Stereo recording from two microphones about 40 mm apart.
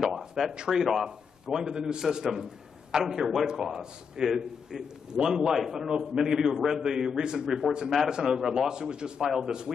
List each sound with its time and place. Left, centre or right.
0.0 s a sound: centre
0.7 s a man's voice: centre
8.4 s a man's voice: centre
8.6 s a man's voice: centre
9.2 s a man's voice: centre